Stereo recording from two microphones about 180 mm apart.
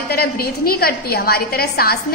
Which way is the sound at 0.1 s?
55° left (ahead or behind).